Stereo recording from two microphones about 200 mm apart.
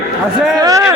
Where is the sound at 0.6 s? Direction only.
15° right (ahead or behind).